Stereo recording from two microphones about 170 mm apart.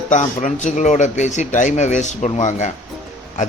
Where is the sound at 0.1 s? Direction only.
45° left (ahead or behind).